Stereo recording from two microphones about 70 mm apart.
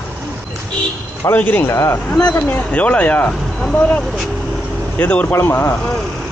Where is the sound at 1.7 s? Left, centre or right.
Left.